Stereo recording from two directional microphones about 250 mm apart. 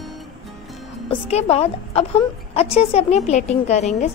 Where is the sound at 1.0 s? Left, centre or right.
Left.